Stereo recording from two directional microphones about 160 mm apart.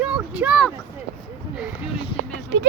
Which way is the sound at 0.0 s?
5° right (ahead or behind).